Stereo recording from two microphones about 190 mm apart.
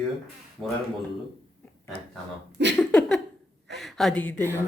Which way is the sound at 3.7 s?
Centre (ahead or behind).